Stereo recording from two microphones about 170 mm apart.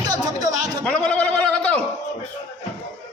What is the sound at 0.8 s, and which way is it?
Speech, 5° left (ahead or behind).